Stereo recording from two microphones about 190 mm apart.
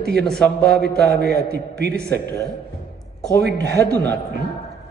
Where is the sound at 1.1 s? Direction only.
60° right (ahead or behind).